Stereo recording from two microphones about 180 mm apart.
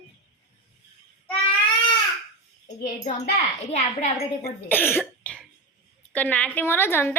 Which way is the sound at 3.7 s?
40° left (ahead or behind).